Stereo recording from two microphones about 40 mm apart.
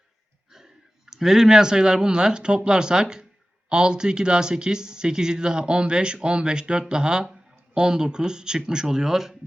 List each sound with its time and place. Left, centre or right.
0.5 s speech: centre